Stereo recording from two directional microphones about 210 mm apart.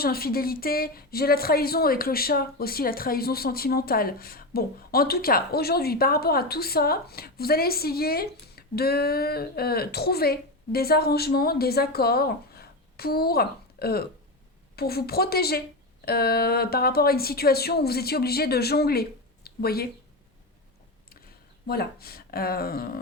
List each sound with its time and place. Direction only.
0.0 s a woman's voice: 45° left (ahead or behind)
21.7 s a woman's voice: 45° left (ahead or behind)